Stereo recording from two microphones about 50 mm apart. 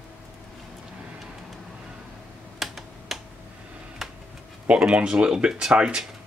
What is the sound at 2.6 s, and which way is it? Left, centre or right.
Computer keyboard, centre.